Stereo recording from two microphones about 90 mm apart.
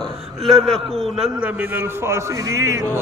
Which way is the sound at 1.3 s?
15° right (ahead or behind).